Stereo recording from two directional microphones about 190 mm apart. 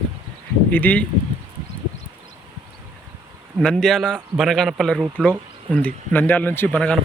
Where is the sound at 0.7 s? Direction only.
10° left (ahead or behind).